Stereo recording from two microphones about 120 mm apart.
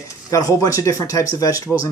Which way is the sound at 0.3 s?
30° left (ahead or behind).